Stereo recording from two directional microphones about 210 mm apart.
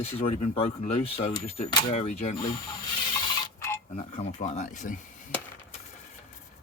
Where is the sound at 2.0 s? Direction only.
35° left (ahead or behind).